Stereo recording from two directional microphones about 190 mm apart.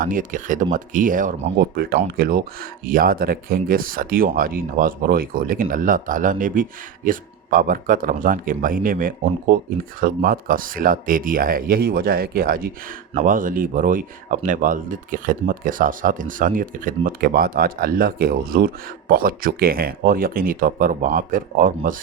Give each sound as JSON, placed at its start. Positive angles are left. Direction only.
{"t": 0.0, "sound": "speech", "side_deg": -45}